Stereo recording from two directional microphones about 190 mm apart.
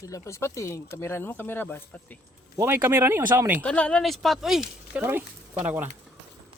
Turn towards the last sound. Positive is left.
turn(degrees=-10)  # may be behind; listen again after turning